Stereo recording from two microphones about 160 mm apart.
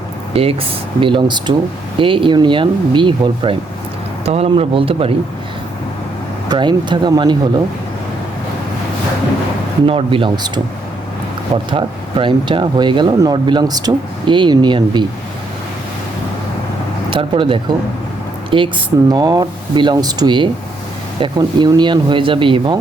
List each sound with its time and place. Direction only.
0.4 s speech: 40° right (ahead or behind)
6.5 s speech: 30° right (ahead or behind)
9.8 s speech: 35° right (ahead or behind)
11.7 s speech: 30° right (ahead or behind)
17.1 s speech: 30° right (ahead or behind)